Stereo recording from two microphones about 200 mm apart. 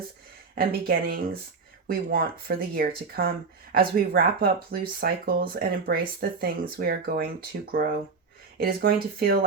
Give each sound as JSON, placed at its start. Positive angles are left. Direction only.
{"t": 0.5, "sound": "speech", "side_deg": -45}